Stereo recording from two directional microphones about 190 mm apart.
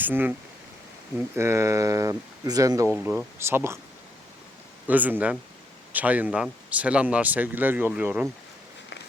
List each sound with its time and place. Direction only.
0.0 s a man's voice: 10° right (ahead or behind)
1.4 s a man's voice: 15° right (ahead or behind)
2.9 s a man's voice: 5° right (ahead or behind)
4.9 s a man's voice: 10° right (ahead or behind)